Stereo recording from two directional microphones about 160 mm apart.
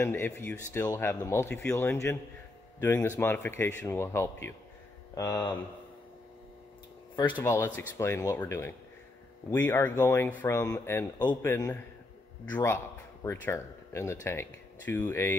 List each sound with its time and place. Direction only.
0.0 s speech: 15° left (ahead or behind)
7.3 s speech: 20° left (ahead or behind)